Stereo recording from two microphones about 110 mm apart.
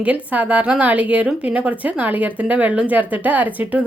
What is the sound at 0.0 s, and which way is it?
A woman's voice, 15° right (ahead or behind).